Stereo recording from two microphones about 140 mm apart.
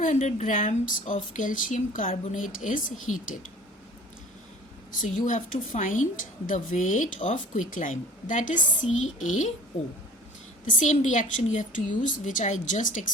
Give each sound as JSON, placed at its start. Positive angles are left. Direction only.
{"t": 0.0, "sound": "speech", "side_deg": 65}
{"t": 4.9, "sound": "a woman's voice", "side_deg": 65}